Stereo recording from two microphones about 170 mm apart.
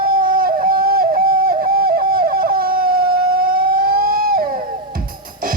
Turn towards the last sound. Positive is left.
turn(degrees=-60)  # may be behind; listen again after turning